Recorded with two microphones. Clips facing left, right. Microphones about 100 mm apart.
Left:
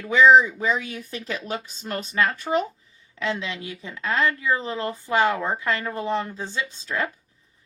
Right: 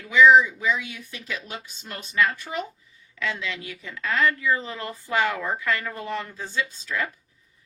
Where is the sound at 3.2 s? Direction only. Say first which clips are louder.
Left 2 dB; 25° left (ahead or behind).